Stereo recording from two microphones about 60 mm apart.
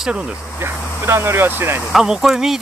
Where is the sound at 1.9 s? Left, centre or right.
Centre.